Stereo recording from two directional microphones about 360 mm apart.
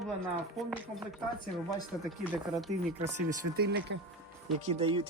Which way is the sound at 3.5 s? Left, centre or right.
Right.